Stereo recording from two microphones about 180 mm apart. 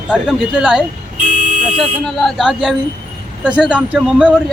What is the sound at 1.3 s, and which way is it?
Vehicle, 45° left (ahead or behind).